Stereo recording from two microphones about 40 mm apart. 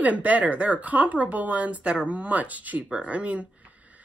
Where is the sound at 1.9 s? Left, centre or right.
Right.